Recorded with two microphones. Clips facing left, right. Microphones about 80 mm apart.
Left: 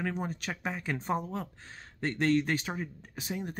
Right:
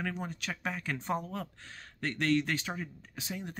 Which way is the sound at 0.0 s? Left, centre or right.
Centre.